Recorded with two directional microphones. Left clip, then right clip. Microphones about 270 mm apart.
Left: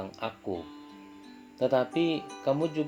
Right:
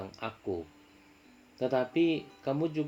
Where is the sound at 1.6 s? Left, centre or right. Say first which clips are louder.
Left 3 dB; centre.